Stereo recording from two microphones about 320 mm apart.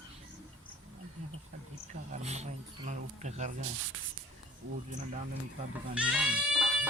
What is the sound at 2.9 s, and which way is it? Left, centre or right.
Speech, right.